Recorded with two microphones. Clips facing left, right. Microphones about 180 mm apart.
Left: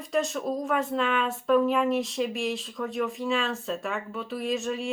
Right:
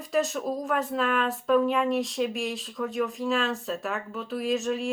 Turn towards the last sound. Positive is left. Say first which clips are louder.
# right 2 dB
turn(degrees=0)  # may be behind; listen again after turning